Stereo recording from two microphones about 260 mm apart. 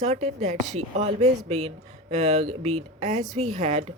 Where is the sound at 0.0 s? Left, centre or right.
Right.